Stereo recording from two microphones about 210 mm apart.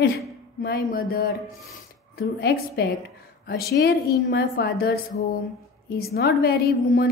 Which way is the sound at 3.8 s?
50° left (ahead or behind).